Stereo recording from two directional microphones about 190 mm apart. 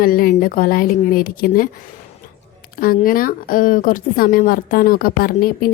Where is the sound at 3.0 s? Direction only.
50° left (ahead or behind).